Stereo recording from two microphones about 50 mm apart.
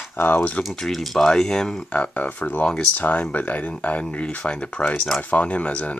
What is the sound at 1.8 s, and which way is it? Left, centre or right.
Speech, left.